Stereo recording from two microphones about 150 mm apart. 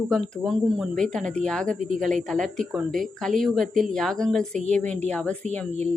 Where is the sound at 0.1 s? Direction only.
Centre (ahead or behind).